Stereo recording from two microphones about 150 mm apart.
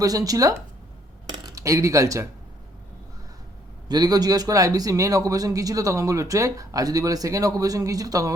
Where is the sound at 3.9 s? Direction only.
25° right (ahead or behind).